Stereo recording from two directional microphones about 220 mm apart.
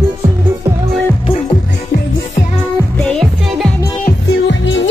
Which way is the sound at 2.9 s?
5° left (ahead or behind).